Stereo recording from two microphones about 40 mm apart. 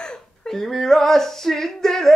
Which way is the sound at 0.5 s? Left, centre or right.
Centre.